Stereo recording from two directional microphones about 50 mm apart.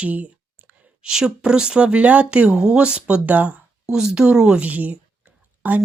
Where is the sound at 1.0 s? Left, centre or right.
Centre; by 3.6 s right.